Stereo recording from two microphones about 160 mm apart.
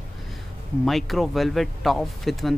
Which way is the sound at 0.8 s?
Centre (ahead or behind).